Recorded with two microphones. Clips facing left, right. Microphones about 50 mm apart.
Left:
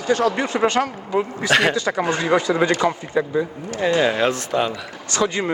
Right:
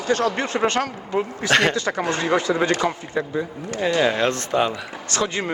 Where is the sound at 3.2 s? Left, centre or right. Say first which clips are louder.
Left 5 dB; centre.